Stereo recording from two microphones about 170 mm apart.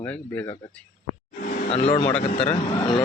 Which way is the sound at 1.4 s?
50° left (ahead or behind).